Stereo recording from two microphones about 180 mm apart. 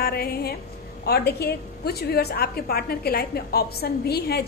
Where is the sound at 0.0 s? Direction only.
60° left (ahead or behind).